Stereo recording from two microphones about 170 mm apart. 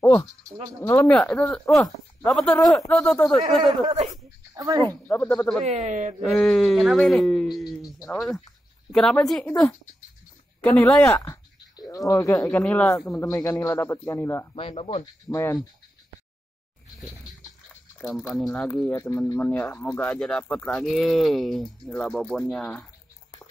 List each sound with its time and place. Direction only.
0.0 s speech: 10° left (ahead or behind)
3.8 s speech: 40° right (ahead or behind)
4.6 s speech: 20° right (ahead or behind)
4.8 s speech: 15° left (ahead or behind)
5.7 s speech: 45° right (ahead or behind)
6.2 s speech: centre (ahead or behind)
14.5 s speech: 30° left (ahead or behind)
15.2 s speech: 20° left (ahead or behind)
18.0 s speech: centre (ahead or behind)